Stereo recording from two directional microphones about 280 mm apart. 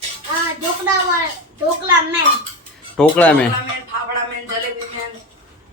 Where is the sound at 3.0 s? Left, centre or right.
Centre.